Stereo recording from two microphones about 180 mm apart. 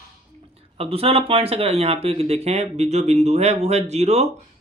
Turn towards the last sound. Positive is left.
turn(degrees=-40)  # may be behind; listen again after turning